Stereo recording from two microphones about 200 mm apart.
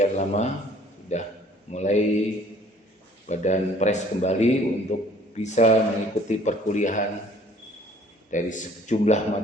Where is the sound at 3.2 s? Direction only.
35° left (ahead or behind).